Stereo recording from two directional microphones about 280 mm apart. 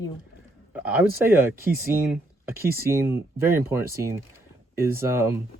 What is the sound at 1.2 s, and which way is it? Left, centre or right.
Speech, centre.